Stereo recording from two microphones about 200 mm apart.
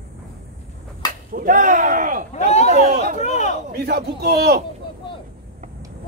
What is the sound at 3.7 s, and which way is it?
Speech, 55° right (ahead or behind).